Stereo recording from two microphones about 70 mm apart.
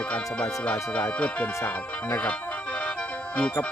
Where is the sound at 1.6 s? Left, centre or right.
Left.